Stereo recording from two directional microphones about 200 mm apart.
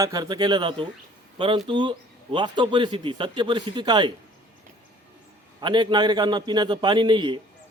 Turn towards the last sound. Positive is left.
turn(degrees=-25)  # may be behind; listen again after turning